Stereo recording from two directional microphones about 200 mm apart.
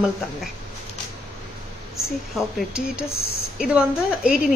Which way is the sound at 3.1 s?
90° left.